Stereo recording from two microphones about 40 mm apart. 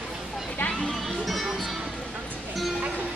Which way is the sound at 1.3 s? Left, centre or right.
Centre.